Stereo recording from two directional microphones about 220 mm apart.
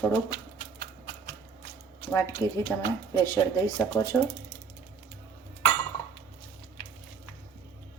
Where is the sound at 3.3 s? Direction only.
15° left (ahead or behind).